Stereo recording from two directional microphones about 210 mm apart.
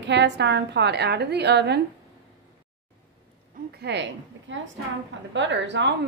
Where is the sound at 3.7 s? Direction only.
55° right (ahead or behind).